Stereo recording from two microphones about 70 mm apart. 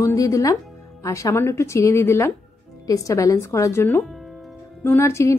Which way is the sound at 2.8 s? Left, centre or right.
Left.